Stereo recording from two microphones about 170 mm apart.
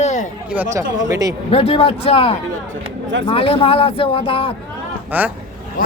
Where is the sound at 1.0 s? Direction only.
20° right (ahead or behind).